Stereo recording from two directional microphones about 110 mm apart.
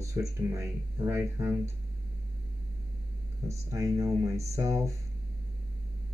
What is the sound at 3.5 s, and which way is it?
Speech, 30° right (ahead or behind).